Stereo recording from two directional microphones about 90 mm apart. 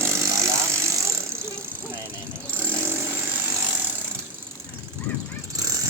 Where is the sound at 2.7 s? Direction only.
30° right (ahead or behind).